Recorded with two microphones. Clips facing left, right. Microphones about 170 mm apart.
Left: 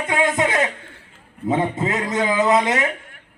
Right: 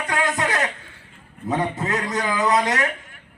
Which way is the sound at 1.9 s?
20° left (ahead or behind).